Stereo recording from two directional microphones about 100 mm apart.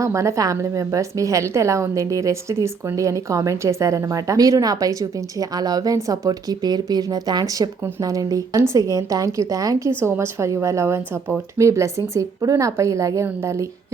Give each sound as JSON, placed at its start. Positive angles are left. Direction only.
{"t": 0.0, "sound": "a woman's voice", "side_deg": -30}